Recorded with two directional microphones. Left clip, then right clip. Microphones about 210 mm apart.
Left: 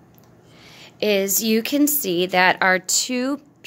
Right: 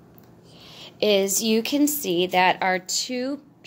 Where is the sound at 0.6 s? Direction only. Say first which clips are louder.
Even; 5° left (ahead or behind).